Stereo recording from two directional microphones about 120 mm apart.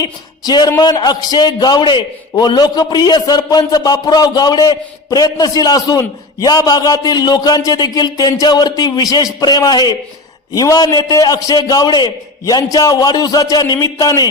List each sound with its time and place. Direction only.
0.0 s a man's voice: 35° left (ahead or behind)